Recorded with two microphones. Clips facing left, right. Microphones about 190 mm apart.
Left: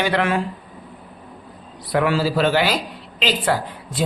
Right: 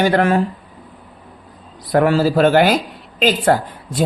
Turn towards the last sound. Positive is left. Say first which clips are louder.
# right 5 dB
turn(degrees=-45)  # may be behind; listen again after turning